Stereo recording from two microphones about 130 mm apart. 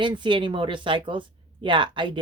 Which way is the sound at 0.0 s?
40° right (ahead or behind).